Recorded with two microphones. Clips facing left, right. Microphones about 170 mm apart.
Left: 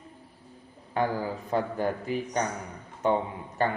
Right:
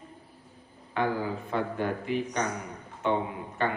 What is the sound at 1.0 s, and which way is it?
Speech, 40° left (ahead or behind).